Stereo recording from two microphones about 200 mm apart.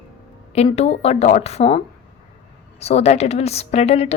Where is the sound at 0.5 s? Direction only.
30° left (ahead or behind).